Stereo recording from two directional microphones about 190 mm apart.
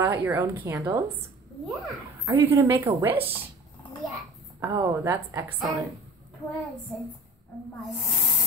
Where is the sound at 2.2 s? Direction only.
15° right (ahead or behind).